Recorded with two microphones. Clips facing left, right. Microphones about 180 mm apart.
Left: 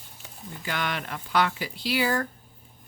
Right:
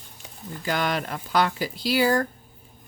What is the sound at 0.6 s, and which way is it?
Speech, 40° right (ahead or behind).